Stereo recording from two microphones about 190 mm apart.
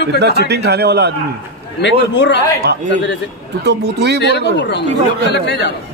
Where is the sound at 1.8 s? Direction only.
65° left (ahead or behind).